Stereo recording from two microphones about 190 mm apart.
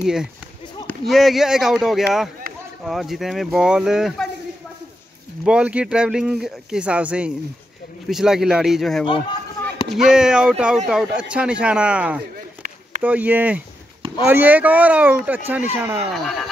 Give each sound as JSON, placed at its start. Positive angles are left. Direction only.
{"t": 0.0, "sound": "speech", "side_deg": -5}
{"t": 5.4, "sound": "speech", "side_deg": -5}
{"t": 9.0, "sound": "chop", "side_deg": 25}
{"t": 9.9, "sound": "speech", "side_deg": -5}
{"t": 16.1, "sound": "speech", "side_deg": 0}